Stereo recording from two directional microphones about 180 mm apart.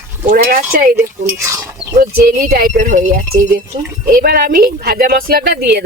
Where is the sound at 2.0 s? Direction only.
55° right (ahead or behind).